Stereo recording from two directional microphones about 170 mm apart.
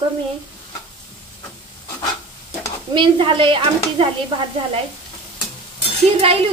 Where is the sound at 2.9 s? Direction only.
30° right (ahead or behind).